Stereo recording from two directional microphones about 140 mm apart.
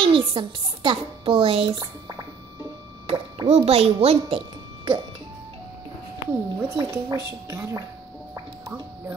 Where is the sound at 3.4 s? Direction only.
45° right (ahead or behind).